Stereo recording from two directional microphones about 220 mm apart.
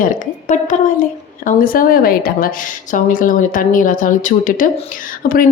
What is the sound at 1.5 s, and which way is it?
A woman's voice, 40° left (ahead or behind).